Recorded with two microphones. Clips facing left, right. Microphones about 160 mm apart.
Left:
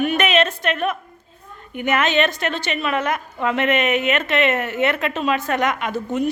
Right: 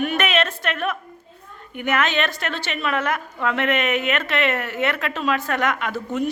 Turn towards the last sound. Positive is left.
turn(degrees=20)  # may be behind; listen again after turning